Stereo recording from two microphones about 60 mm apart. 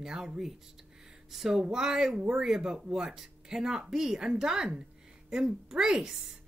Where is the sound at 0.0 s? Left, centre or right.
Centre.